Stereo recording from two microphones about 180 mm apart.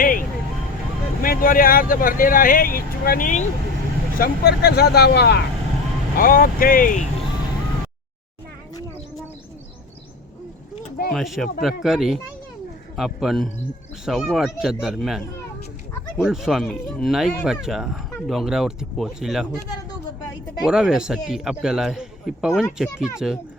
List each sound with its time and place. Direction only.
0.0 s vehicle: 50° left (ahead or behind)
1.2 s speech: 50° left (ahead or behind)
4.2 s speech: 65° left (ahead or behind)
6.1 s speech: 50° left (ahead or behind)
11.1 s speech: centre (ahead or behind)
20.7 s speech: 5° right (ahead or behind)